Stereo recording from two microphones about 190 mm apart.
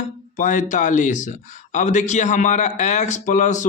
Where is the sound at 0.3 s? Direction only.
40° left (ahead or behind).